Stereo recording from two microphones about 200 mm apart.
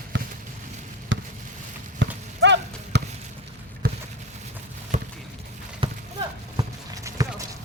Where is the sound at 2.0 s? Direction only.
60° right (ahead or behind).